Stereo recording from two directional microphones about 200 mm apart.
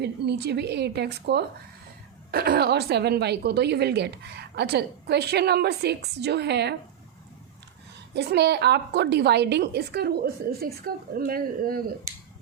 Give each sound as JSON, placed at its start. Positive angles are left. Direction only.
{"t": 0.0, "sound": "a woman's voice", "side_deg": -55}
{"t": 8.1, "sound": "a woman's voice", "side_deg": -55}